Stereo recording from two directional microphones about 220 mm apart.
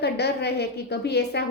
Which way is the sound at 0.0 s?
50° left (ahead or behind).